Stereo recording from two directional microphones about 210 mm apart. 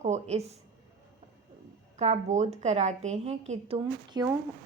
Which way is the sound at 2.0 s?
35° right (ahead or behind).